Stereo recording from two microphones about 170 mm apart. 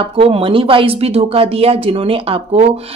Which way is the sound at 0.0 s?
35° right (ahead or behind).